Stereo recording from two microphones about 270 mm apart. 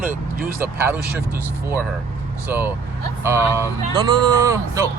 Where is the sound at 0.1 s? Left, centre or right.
Right.